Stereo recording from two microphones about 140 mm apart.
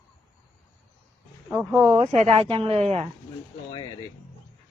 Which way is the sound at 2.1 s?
45° right (ahead or behind).